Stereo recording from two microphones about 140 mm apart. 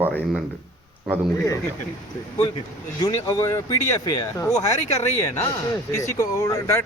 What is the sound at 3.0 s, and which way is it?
Speech, 25° left (ahead or behind).